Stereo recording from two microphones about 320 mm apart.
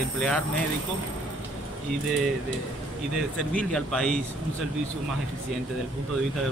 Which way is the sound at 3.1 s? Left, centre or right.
Centre.